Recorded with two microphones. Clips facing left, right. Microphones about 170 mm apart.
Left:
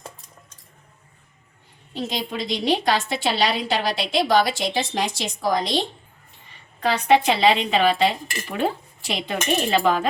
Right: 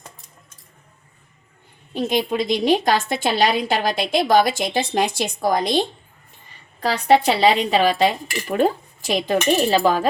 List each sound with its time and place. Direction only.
1.9 s a woman's voice: 50° right (ahead or behind)
6.7 s speech: 35° right (ahead or behind)